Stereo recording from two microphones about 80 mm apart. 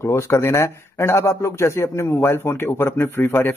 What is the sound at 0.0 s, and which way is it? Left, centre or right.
Speech, left.